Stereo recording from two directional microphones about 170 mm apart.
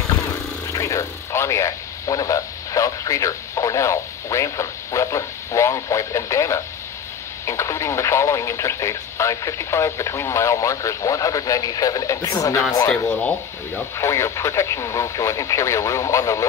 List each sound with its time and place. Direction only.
0.7 s speech: 20° left (ahead or behind)
13.7 s speech: 15° left (ahead or behind)